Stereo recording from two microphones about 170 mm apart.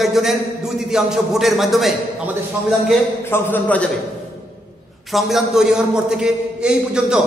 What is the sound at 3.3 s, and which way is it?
Speech, 15° left (ahead or behind).